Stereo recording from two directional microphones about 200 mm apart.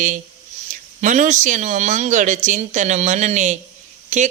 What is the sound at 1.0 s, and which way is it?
Speech, 40° right (ahead or behind).